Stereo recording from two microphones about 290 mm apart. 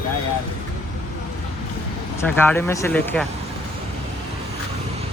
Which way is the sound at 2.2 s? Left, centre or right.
Centre.